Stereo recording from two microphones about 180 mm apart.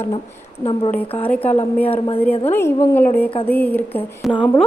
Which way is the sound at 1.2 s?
10° left (ahead or behind).